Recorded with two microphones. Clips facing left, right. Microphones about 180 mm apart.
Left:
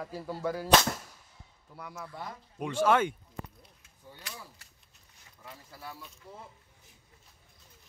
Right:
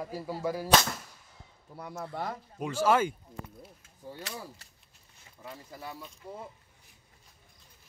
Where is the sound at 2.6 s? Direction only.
5° right (ahead or behind).